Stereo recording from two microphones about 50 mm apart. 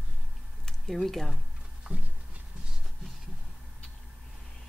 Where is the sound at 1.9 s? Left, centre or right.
Right.